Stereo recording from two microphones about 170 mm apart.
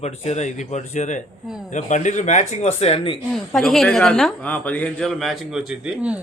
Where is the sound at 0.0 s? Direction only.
40° left (ahead or behind).